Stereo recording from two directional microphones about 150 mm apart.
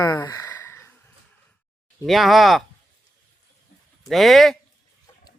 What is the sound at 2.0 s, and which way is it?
Speech, centre (ahead or behind).